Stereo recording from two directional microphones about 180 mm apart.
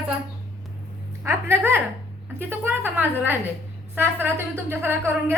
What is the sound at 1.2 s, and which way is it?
A woman's voice, 15° right (ahead or behind).